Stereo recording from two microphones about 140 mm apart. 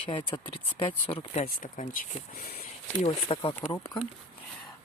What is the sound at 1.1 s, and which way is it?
Speech, 40° left (ahead or behind).